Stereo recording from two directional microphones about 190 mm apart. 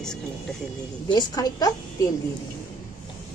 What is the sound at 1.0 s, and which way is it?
Speech, 20° left (ahead or behind).